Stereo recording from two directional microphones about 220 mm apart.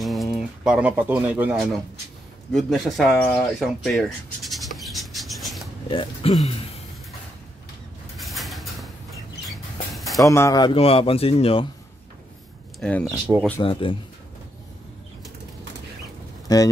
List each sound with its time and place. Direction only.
0.0 s speech: centre (ahead or behind)
5.9 s speech: 20° left (ahead or behind)
8.2 s bird flight: centre (ahead or behind)
10.2 s speech: 15° left (ahead or behind)
12.8 s speech: 5° left (ahead or behind)
13.6 s speech: 25° left (ahead or behind)
16.4 s speech: 15° left (ahead or behind)